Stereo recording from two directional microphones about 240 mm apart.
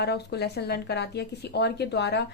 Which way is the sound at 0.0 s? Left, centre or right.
Left.